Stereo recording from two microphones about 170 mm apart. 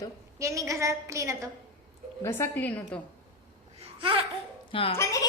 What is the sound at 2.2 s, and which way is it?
Speech, 15° left (ahead or behind).